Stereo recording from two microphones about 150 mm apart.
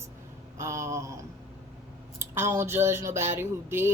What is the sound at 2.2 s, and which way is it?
Speech, 15° right (ahead or behind).